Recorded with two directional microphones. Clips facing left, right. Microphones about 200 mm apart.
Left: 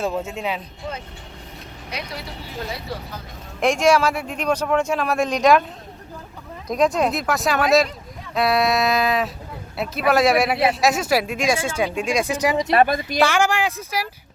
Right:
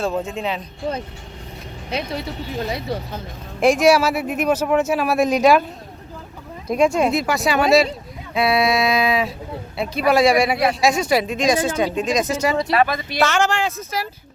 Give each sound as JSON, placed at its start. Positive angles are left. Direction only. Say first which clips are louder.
{"t": 0.1, "sound": "speech", "louder": "right 2 dB", "side_deg": 5}
{"t": 1.9, "sound": "speech", "louder": "right 7 dB", "side_deg": -25}
{"t": 3.6, "sound": "speech", "louder": "right 3 dB", "side_deg": -5}
{"t": 6.7, "sound": "speech", "louder": "right 2 dB", "side_deg": -5}
{"t": 12.7, "sound": "speech", "louder": "left 1 dB", "side_deg": 45}
{"t": 13.2, "sound": "speech", "louder": "right 1 dB", "side_deg": 15}